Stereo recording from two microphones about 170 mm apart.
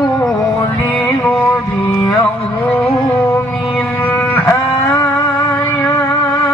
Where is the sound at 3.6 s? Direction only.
Centre (ahead or behind).